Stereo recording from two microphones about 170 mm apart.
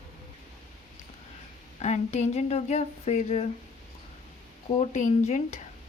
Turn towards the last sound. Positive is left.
turn(degrees=45)  # may be behind; listen again after turning